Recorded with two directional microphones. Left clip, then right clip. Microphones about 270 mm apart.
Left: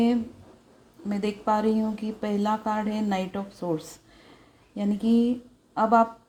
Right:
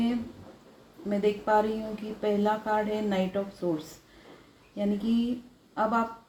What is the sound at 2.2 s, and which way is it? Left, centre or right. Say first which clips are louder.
Speech: right 1 dB; left.